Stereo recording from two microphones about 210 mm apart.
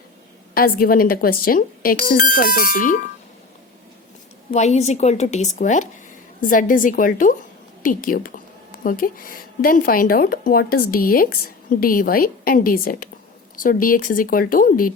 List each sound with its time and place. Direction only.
0.5 s speech: 45° left (ahead or behind)
4.5 s speech: 35° left (ahead or behind)